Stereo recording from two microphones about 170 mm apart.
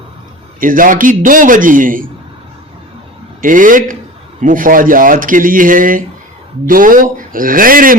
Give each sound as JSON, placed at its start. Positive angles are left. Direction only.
{"t": 0.6, "sound": "speech", "side_deg": -55}
{"t": 3.4, "sound": "speech", "side_deg": -50}